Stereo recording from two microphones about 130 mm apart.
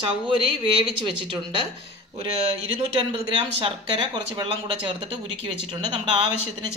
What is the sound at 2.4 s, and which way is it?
Speech, 50° right (ahead or behind).